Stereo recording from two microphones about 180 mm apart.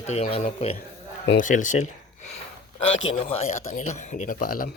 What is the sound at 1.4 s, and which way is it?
Speech, 45° left (ahead or behind).